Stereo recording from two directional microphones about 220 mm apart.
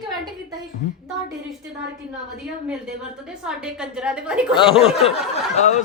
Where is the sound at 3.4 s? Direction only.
5° right (ahead or behind).